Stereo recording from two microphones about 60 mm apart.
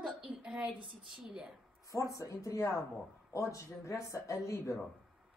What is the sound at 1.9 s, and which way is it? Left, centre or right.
Speech, left.